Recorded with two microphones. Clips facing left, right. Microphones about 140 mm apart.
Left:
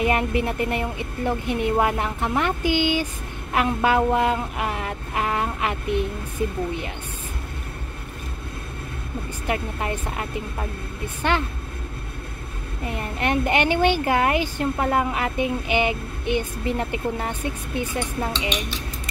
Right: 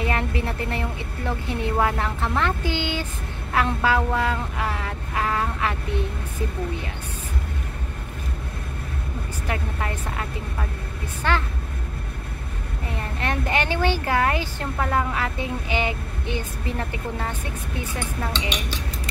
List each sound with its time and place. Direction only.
0.0 s speech: 15° left (ahead or behind)
9.5 s speech: 20° left (ahead or behind)
11.2 s speech: 20° left (ahead or behind)
13.2 s speech: 20° left (ahead or behind)